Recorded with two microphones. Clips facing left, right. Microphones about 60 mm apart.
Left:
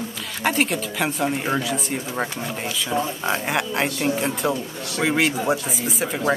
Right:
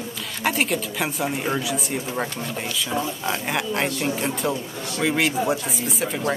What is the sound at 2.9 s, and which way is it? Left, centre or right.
Speech, left.